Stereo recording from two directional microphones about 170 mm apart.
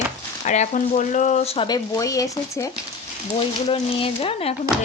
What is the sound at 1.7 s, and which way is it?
Speech, 25° left (ahead or behind).